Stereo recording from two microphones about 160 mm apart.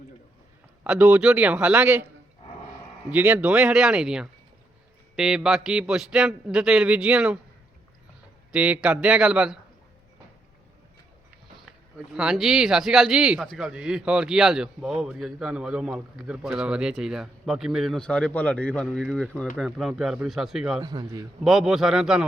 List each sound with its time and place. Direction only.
0.9 s a man's voice: 10° right (ahead or behind)
3.1 s a man's voice: 10° right (ahead or behind)
8.5 s a man's voice: 10° right (ahead or behind)
12.1 s a man's voice: 5° right (ahead or behind)
20.8 s a man's voice: 25° right (ahead or behind)
21.4 s a man's voice: centre (ahead or behind)